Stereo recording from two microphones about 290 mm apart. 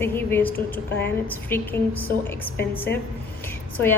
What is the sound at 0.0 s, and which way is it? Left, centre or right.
A woman's voice, centre.